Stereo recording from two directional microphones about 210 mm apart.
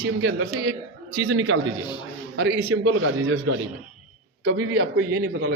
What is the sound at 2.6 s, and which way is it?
Speech, 65° right (ahead or behind).